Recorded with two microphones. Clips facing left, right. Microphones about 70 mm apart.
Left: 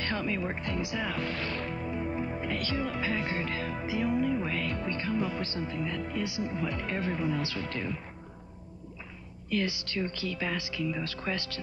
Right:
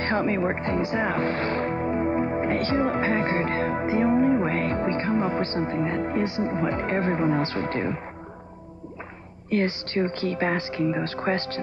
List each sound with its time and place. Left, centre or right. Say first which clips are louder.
0.0 s speech: right 8 dB; right
9.5 s speech: right 7 dB; right